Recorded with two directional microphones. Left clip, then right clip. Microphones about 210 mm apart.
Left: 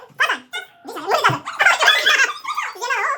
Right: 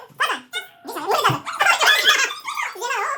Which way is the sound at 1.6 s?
10° left (ahead or behind).